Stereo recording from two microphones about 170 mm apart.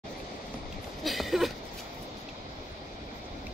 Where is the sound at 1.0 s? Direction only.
Centre (ahead or behind).